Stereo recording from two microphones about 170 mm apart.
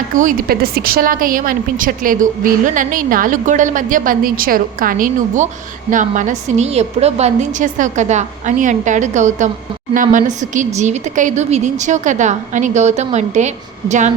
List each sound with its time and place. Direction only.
0.2 s a woman's voice: 55° right (ahead or behind)